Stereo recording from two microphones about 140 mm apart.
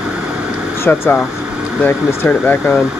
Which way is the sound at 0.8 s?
15° left (ahead or behind).